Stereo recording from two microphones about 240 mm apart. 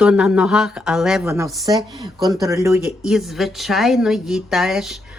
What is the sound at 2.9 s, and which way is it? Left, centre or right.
A woman's voice, centre.